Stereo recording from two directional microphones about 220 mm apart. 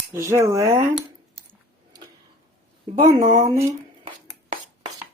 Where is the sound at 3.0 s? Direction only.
15° right (ahead or behind).